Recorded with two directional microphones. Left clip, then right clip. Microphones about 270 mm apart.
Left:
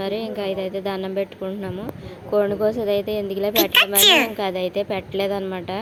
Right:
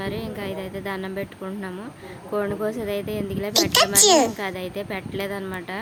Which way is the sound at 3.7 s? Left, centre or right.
Centre.